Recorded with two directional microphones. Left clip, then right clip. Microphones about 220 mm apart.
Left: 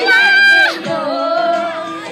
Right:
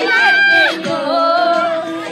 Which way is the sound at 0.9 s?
45° right (ahead or behind).